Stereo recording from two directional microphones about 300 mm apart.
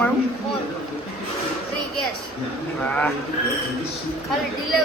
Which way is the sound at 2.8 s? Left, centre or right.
Centre.